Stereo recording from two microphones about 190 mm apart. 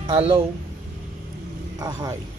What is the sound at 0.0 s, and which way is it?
Speech, 30° right (ahead or behind).